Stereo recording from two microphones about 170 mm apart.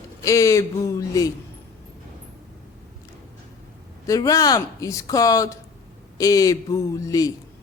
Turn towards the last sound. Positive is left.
turn(degrees=20)  # may be behind; listen again after turning